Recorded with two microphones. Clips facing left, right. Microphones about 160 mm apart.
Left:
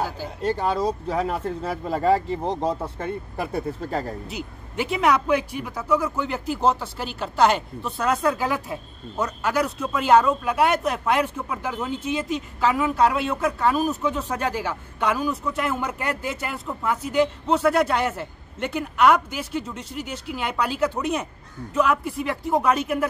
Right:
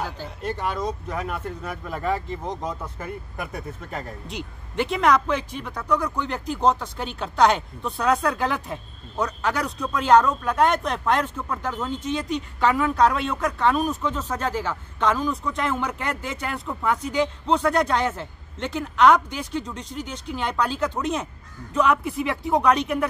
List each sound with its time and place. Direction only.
0.4 s speech: 35° left (ahead or behind)
4.3 s speech: 5° left (ahead or behind)